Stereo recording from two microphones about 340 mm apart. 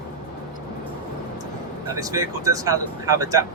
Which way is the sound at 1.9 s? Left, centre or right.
Centre.